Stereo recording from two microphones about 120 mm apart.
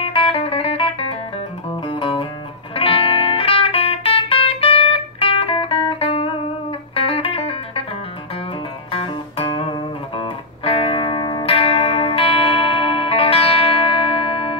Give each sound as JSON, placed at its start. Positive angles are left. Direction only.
{"t": 0.0, "sound": "music", "side_deg": 50}
{"t": 8.9, "sound": "music", "side_deg": 50}